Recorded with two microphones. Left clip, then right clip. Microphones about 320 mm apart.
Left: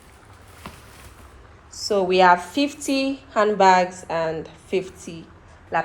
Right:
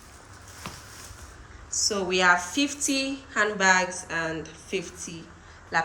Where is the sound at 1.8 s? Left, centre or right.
Centre.